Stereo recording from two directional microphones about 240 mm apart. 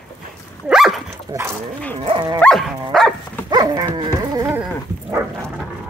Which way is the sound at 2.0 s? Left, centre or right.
Right.